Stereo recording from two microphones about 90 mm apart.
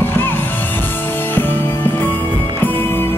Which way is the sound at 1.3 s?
20° left (ahead or behind).